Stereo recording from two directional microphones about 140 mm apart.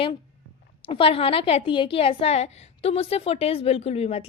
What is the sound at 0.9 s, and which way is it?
A woman's voice, 40° left (ahead or behind).